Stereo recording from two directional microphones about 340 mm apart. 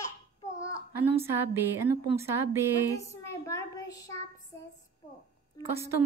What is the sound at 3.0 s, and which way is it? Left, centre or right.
A woman's voice, centre.